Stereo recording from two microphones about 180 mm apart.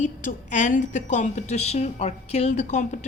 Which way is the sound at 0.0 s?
45° left (ahead or behind).